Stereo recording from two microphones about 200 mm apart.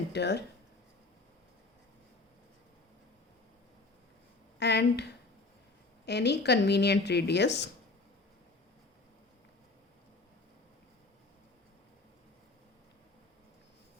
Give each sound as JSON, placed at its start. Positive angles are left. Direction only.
{"t": 0.1, "sound": "speech", "side_deg": 55}
{"t": 4.6, "sound": "speech", "side_deg": 55}